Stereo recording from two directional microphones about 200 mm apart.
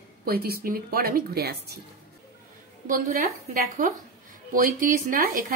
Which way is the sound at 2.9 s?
40° right (ahead or behind).